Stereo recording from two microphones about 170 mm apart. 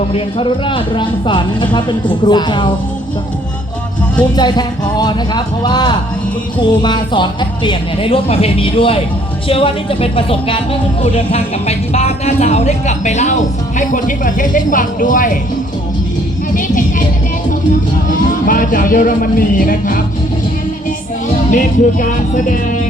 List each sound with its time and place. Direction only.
0.1 s speech: 30° left (ahead or behind)
4.2 s speech: 25° left (ahead or behind); by 15.4 s 50° left (ahead or behind)
18.1 s speech: 50° left (ahead or behind)
21.5 s speech: 50° left (ahead or behind)